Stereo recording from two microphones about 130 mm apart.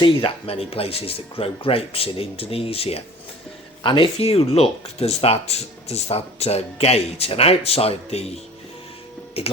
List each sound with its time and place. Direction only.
0.0 s speech: 45° left (ahead or behind)
9.4 s speech: 50° left (ahead or behind)